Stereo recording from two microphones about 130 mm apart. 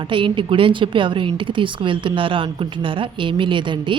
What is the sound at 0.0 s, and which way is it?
A woman's voice, 40° right (ahead or behind).